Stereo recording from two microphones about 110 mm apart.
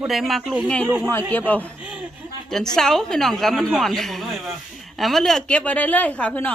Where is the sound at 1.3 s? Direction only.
15° left (ahead or behind).